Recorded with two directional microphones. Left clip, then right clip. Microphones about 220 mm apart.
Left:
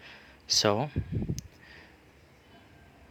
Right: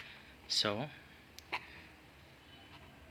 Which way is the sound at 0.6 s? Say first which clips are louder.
Left 9 dB; 45° left (ahead or behind).